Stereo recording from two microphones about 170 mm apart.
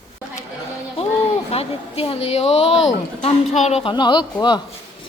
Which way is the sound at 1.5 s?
35° left (ahead or behind).